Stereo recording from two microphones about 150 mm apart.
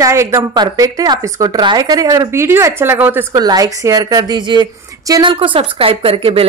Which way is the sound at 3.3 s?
25° right (ahead or behind).